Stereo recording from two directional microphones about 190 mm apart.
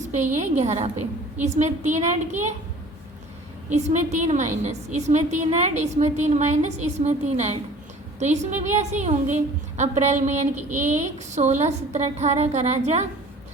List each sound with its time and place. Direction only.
0.0 s a woman's voice: 40° right (ahead or behind)
3.7 s a woman's voice: 40° right (ahead or behind)